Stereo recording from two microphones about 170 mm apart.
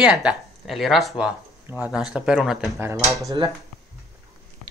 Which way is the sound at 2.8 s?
15° right (ahead or behind).